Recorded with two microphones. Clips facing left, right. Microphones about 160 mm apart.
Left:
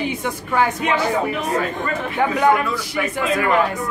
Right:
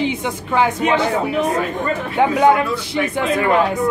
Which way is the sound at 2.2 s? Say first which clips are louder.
Right 3 dB; 20° right (ahead or behind).